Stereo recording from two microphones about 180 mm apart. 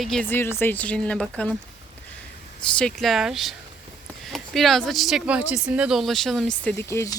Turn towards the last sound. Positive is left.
turn(degrees=15)  # may be behind; listen again after turning